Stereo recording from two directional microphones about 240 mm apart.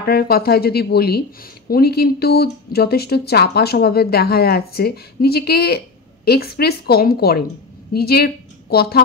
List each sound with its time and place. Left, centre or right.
0.0 s a woman's voice: left